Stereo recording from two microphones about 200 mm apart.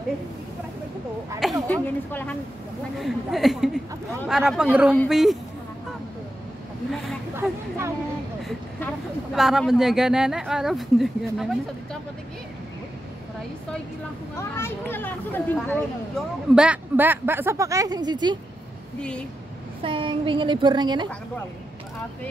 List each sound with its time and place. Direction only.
1.4 s speech: 5° left (ahead or behind)
6.9 s speech: centre (ahead or behind)
9.3 s speech: centre (ahead or behind)
14.5 s speech: 10° left (ahead or behind)
16.5 s speech: 5° right (ahead or behind); by 18.4 s 20° right (ahead or behind)
18.9 s speech: 5° left (ahead or behind)
19.8 s speech: 25° right (ahead or behind)